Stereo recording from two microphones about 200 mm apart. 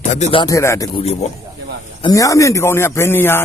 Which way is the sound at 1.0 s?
30° left (ahead or behind).